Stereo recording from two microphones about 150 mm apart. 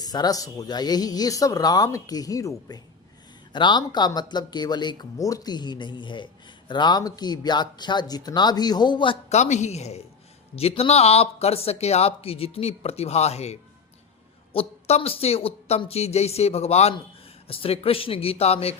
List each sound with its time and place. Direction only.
0.0 s speech: 25° left (ahead or behind)
9.3 s speech: 50° left (ahead or behind)